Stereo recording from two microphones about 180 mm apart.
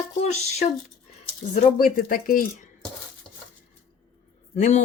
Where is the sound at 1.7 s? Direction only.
55° left (ahead or behind).